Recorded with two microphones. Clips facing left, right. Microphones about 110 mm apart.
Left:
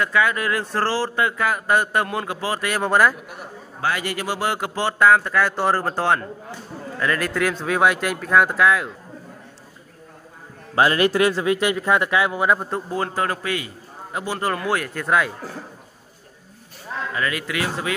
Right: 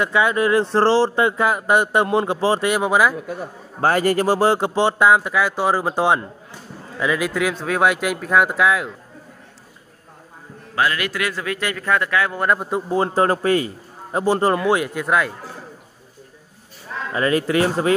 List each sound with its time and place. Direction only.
0.0 s speech: 20° right (ahead or behind)
2.8 s speech: 5° right (ahead or behind)
3.8 s speech: 40° right (ahead or behind); by 8.9 s 5° right (ahead or behind)
10.7 s a man's voice: 30° left (ahead or behind)
12.5 s speech: 10° right (ahead or behind)
12.9 s speech: 30° right (ahead or behind)
15.0 s speech: centre (ahead or behind)
17.1 s speech: 35° right (ahead or behind)